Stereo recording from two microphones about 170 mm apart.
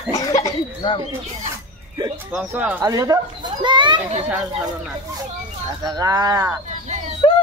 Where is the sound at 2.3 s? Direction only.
10° right (ahead or behind).